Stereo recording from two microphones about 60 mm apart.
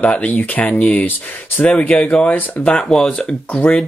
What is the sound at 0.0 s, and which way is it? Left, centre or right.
Speech, left.